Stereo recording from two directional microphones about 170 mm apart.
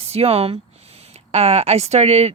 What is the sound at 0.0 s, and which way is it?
Speech, 35° right (ahead or behind).